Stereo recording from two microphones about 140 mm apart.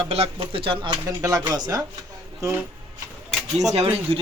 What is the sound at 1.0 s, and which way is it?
Speech, 25° right (ahead or behind).